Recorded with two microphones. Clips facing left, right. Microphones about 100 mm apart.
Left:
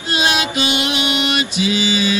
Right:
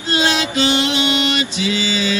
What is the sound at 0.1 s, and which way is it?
Mantra, 15° left (ahead or behind).